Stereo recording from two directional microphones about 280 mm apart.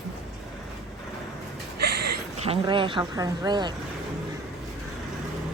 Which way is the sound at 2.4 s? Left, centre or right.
Centre.